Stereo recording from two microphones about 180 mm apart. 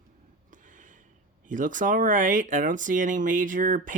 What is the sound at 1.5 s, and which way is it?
Speech, 45° right (ahead or behind).